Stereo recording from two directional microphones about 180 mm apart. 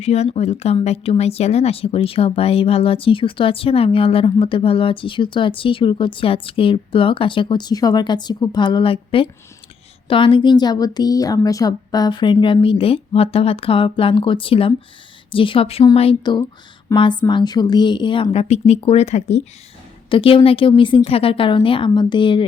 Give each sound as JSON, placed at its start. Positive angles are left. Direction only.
{"t": 0.0, "sound": "speech", "side_deg": 35}